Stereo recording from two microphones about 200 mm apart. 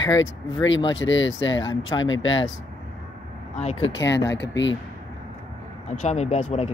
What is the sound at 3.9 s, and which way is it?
Speech, 60° left (ahead or behind).